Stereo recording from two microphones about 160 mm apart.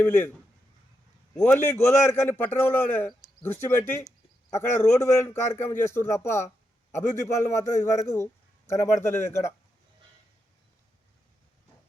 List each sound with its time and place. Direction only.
0.0 s a man's voice: 10° left (ahead or behind)
1.5 s a man's voice: 15° left (ahead or behind)